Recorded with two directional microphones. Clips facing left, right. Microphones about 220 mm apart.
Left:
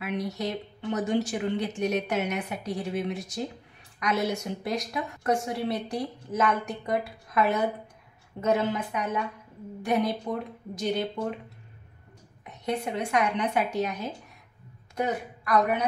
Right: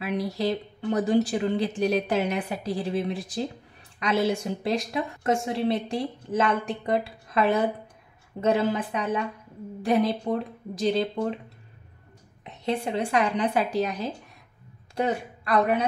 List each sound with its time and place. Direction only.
0.0 s a woman's voice: 30° right (ahead or behind)
12.4 s a woman's voice: 30° right (ahead or behind)